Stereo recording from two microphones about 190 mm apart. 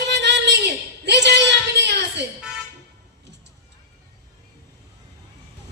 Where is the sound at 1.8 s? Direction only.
65° right (ahead or behind).